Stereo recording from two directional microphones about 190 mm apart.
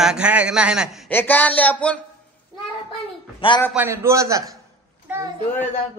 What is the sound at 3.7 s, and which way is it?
Speech, 10° right (ahead or behind).